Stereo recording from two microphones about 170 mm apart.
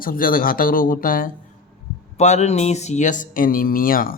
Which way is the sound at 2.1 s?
40° left (ahead or behind).